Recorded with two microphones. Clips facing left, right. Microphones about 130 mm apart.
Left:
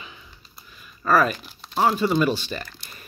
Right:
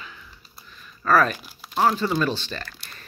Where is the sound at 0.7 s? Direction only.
10° left (ahead or behind).